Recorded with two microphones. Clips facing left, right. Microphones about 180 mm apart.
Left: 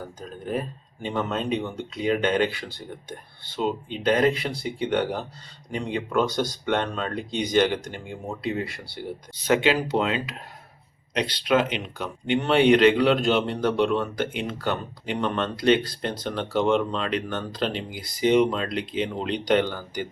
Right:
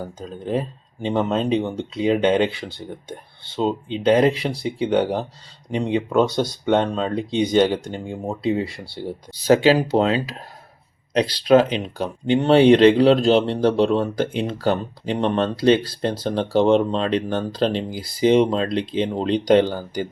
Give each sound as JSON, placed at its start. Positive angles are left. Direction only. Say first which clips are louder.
{"t": 1.0, "sound": "speech", "louder": "right 6 dB", "side_deg": -30}